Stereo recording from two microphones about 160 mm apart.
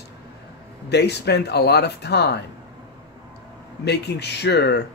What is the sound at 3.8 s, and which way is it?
A man's voice, 90° left.